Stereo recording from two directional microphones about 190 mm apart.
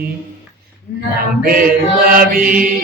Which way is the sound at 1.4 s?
50° right (ahead or behind).